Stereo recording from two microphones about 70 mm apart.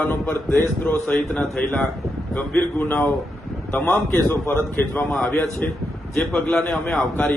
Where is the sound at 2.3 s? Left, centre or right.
Centre.